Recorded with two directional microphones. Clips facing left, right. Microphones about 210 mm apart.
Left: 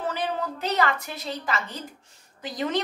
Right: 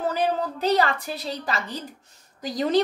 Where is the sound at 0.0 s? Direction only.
40° right (ahead or behind).